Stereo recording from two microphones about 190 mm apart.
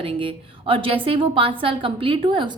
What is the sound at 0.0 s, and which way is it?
A woman's voice, 30° right (ahead or behind).